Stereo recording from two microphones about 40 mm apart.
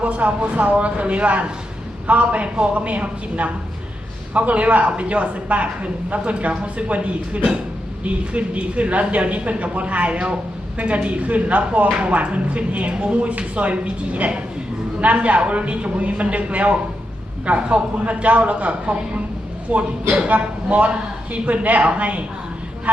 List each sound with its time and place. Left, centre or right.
0.0 s speech: right